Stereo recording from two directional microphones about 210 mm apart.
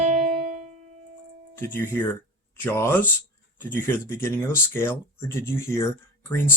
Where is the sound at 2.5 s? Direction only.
10° left (ahead or behind).